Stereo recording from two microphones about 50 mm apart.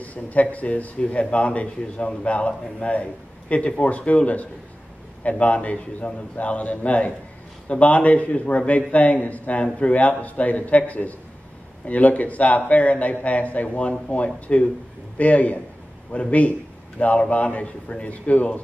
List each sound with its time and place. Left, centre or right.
0.0 s a man's voice: left